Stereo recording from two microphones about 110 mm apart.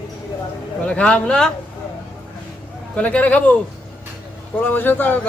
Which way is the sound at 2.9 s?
10° left (ahead or behind).